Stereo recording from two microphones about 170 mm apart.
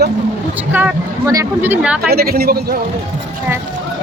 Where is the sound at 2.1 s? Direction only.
65° right (ahead or behind).